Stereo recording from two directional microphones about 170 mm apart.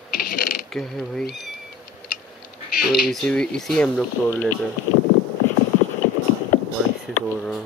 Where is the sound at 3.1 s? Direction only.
5° left (ahead or behind).